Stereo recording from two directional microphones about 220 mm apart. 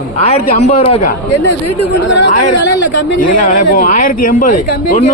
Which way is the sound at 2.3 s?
40° left (ahead or behind).